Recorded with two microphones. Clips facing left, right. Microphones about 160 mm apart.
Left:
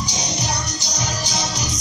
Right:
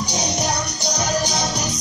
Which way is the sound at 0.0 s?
60° right (ahead or behind).